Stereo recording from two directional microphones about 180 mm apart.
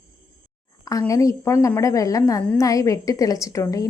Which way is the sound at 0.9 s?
20° left (ahead or behind).